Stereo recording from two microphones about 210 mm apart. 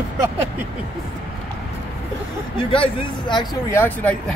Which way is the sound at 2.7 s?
25° left (ahead or behind).